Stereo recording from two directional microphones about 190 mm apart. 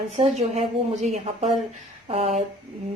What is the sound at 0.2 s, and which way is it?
Speech, 35° right (ahead or behind).